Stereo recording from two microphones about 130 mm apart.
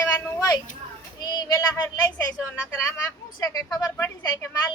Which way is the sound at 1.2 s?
30° left (ahead or behind).